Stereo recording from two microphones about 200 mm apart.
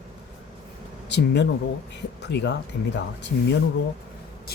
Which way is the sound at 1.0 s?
60° left (ahead or behind).